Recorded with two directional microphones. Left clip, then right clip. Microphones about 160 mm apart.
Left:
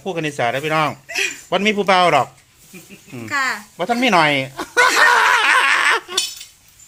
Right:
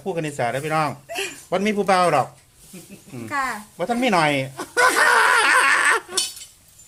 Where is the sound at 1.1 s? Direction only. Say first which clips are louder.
Left 7 dB; 30° right (ahead or behind).